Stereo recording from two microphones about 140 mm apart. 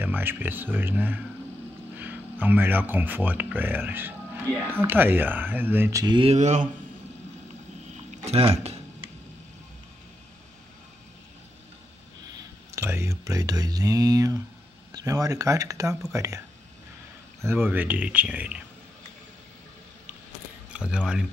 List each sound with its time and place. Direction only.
0.0 s speech: 15° right (ahead or behind)
6.3 s mantra: 55° right (ahead or behind)
8.1 s speech: 45° right (ahead or behind)
12.4 s speech: 20° right (ahead or behind)
20.7 s speech: 5° right (ahead or behind)